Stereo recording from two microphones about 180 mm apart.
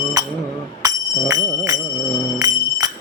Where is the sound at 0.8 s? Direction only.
20° right (ahead or behind).